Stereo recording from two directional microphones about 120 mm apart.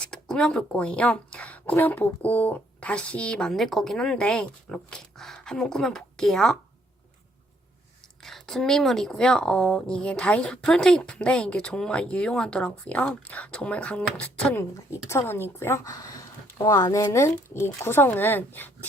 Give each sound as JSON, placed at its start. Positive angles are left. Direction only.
{"t": 0.0, "sound": "speech", "side_deg": 10}
{"t": 8.2, "sound": "speech", "side_deg": 5}